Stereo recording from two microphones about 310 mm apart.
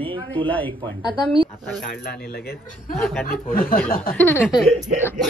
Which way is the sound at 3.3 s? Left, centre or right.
Left.